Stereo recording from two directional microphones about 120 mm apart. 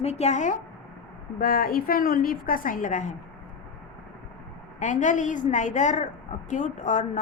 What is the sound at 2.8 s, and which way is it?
Speech, 90° left.